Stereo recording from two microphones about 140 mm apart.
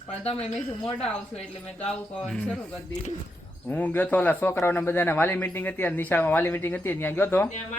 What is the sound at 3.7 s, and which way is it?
A man's voice, 10° left (ahead or behind).